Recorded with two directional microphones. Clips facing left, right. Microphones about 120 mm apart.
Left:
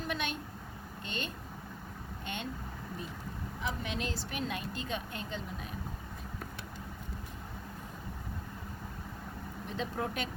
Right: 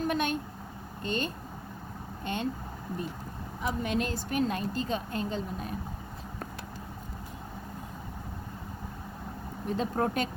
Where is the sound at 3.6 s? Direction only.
45° right (ahead or behind).